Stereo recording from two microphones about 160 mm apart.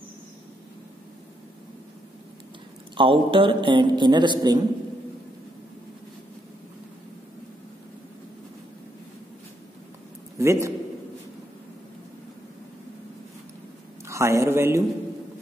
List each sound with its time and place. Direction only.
3.0 s a man's voice: 35° right (ahead or behind)
10.4 s a man's voice: 20° right (ahead or behind)
14.0 s a man's voice: 20° right (ahead or behind)